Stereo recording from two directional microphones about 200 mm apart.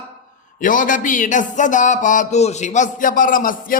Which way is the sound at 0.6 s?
40° left (ahead or behind).